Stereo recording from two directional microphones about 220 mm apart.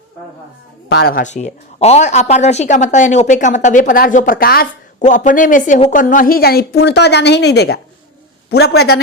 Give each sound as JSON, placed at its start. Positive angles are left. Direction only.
{"t": 0.9, "sound": "speech", "side_deg": 45}